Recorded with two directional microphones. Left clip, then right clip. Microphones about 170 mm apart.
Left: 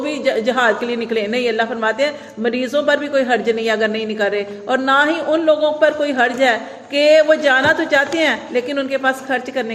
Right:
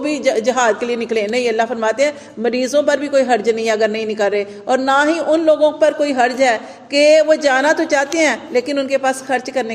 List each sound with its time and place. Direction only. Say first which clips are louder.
0.0 s a woman's voice: right 2 dB; 40° right (ahead or behind)